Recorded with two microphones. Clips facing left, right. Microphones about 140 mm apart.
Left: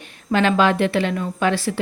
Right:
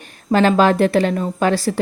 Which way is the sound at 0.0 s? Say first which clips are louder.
Right 4 dB; 40° right (ahead or behind).